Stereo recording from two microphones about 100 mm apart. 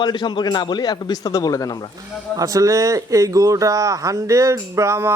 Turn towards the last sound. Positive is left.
turn(degrees=-25)  # may be behind; listen again after turning